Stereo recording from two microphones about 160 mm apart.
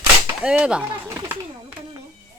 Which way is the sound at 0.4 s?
5° right (ahead or behind).